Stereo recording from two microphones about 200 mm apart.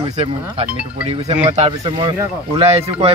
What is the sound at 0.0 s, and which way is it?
Speech, 30° right (ahead or behind).